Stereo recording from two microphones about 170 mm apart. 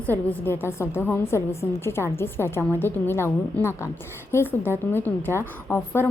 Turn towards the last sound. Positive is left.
turn(degrees=15)  # may be behind; listen again after turning